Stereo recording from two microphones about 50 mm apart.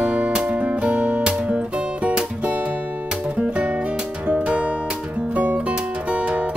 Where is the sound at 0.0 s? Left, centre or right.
Right.